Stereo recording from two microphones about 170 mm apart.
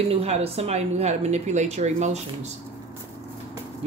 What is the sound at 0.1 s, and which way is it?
Speech, 35° right (ahead or behind).